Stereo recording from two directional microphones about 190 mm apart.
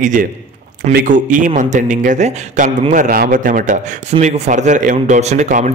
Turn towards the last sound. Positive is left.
turn(degrees=-40)  # may be behind; listen again after turning